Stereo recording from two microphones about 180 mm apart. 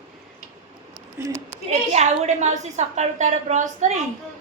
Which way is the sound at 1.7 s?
40° right (ahead or behind).